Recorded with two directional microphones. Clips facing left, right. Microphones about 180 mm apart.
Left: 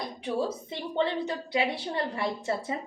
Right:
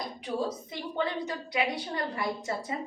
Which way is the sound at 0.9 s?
30° left (ahead or behind).